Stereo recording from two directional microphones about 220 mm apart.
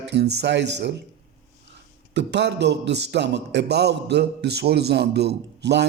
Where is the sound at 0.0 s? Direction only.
50° right (ahead or behind).